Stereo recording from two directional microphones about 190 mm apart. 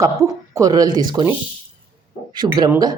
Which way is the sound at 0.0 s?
15° right (ahead or behind).